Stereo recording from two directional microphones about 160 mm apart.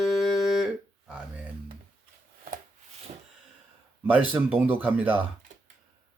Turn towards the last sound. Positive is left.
turn(degrees=-10)  # may be behind; listen again after turning